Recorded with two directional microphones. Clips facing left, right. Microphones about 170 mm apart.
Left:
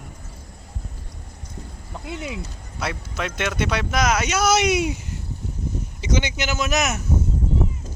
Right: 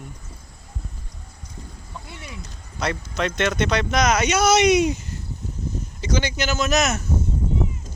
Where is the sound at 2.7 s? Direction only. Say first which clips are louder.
Right 3 dB; 5° left (ahead or behind).